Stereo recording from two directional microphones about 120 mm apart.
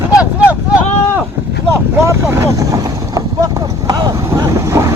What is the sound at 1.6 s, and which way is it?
Vehicle, 20° right (ahead or behind).